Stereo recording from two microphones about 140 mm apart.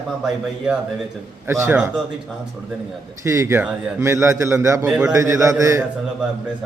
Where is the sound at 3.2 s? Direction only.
20° right (ahead or behind).